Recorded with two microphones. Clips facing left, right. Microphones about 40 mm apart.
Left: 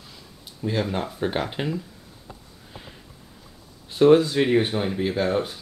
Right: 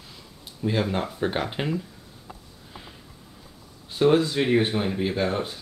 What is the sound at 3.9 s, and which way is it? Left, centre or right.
Speech, centre.